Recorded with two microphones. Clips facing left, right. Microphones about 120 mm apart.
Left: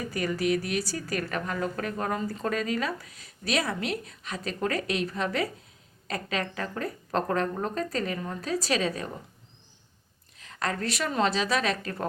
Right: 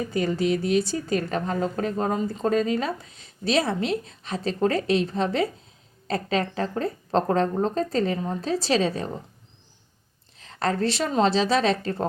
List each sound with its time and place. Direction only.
0.0 s a woman's voice: 25° right (ahead or behind)
10.3 s a woman's voice: 30° right (ahead or behind)